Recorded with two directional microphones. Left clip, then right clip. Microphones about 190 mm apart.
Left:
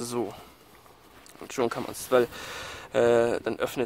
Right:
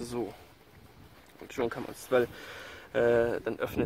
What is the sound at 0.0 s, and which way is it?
Speech, 50° left (ahead or behind).